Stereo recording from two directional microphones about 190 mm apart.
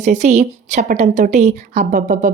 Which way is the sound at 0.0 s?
40° right (ahead or behind).